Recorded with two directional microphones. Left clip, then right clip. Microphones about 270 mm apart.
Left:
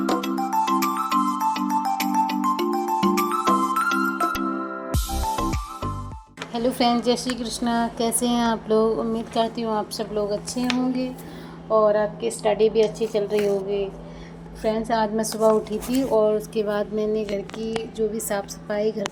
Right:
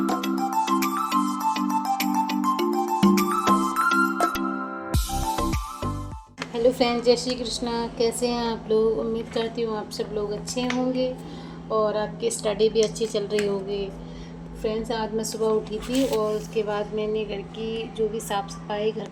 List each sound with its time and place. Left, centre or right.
0.0 s music: centre
6.7 s a woman's voice: left
11.7 s a woman's voice: centre
14.6 s a woman's voice: left
16.6 s speech: left